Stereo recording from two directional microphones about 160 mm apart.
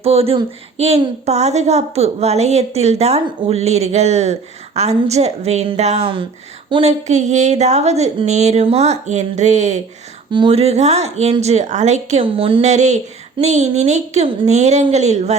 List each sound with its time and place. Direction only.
0.0 s a woman's voice: 40° right (ahead or behind)
7.1 s a woman's voice: 45° right (ahead or behind)
10.3 s speech: 35° right (ahead or behind)
12.2 s a woman's voice: 35° right (ahead or behind)